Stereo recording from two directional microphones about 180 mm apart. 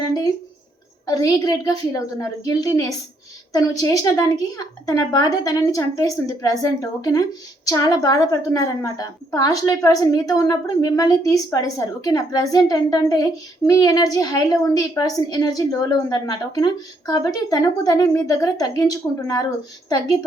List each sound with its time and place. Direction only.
1.0 s a woman's voice: 20° left (ahead or behind)